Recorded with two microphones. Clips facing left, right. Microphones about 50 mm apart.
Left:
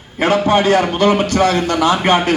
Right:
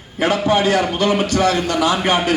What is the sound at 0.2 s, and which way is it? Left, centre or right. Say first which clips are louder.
A man's voice: left 3 dB; left.